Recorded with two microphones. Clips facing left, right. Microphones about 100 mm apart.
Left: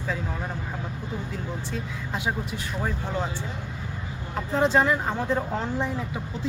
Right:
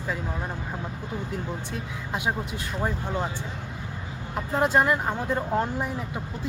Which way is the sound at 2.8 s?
15° right (ahead or behind).